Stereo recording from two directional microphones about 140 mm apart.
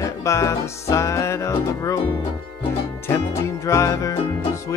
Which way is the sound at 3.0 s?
20° left (ahead or behind).